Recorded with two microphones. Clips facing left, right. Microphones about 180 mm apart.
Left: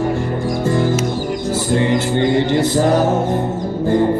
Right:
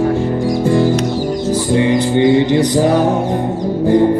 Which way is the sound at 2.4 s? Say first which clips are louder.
Right 3 dB; 15° right (ahead or behind).